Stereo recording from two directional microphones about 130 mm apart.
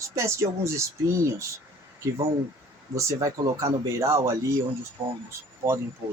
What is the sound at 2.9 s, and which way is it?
Speech, 25° right (ahead or behind).